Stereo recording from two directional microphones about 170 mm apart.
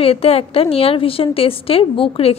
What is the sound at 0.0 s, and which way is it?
A woman's voice, 35° left (ahead or behind).